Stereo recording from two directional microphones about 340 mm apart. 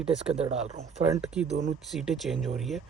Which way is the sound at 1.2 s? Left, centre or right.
Centre.